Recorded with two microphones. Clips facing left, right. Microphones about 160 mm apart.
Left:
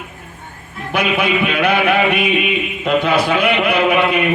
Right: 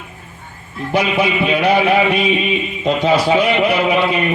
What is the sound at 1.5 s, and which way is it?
A man's voice, 55° left (ahead or behind).